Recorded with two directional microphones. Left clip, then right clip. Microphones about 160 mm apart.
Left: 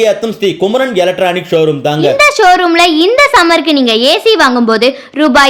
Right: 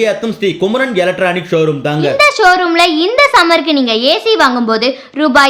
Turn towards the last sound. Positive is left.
turn(degrees=40)  # may be behind; listen again after turning